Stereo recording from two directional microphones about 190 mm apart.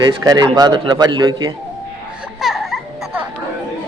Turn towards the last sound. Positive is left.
turn(degrees=0)  # may be behind; listen again after turning